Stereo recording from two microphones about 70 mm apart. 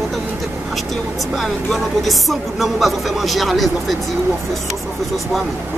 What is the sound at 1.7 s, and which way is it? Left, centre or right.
Speech, centre.